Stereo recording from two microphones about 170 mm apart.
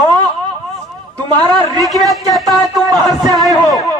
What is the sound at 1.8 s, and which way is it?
A man's voice, centre (ahead or behind).